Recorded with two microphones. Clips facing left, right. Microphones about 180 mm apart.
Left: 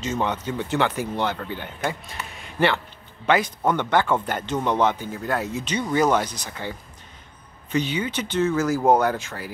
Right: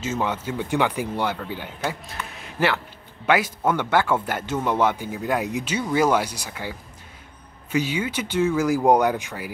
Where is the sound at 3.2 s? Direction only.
10° right (ahead or behind).